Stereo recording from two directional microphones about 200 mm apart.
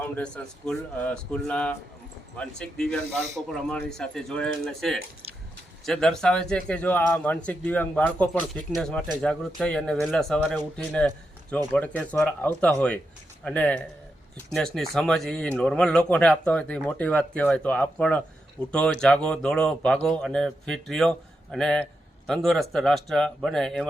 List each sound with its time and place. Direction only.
0.0 s speech: 5° left (ahead or behind)
5.2 s a sound: 30° right (ahead or behind)
5.8 s speech: centre (ahead or behind)